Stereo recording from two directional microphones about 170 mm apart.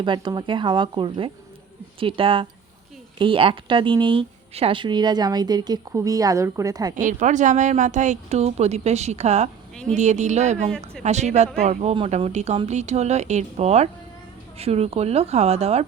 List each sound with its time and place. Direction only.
0.0 s a woman's voice: 25° right (ahead or behind)
6.9 s speech: 50° right (ahead or behind)